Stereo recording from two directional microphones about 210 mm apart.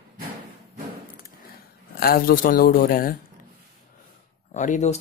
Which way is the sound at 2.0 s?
45° left (ahead or behind).